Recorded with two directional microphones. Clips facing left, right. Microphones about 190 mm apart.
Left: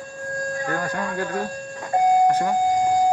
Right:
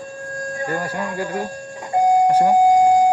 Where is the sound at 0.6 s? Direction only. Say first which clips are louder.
Right 4 dB; 15° right (ahead or behind).